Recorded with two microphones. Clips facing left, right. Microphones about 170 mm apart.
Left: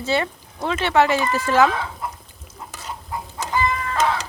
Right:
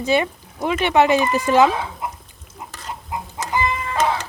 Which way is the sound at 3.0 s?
20° right (ahead or behind).